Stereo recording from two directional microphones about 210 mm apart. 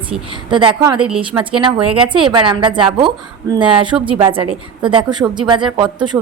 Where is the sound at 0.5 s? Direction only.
25° right (ahead or behind).